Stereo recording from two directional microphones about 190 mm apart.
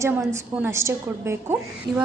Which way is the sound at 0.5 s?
10° right (ahead or behind).